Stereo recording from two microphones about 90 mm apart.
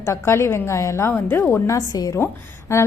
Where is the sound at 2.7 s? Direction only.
30° left (ahead or behind).